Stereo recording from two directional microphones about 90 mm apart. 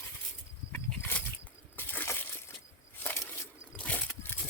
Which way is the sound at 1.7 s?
20° left (ahead or behind).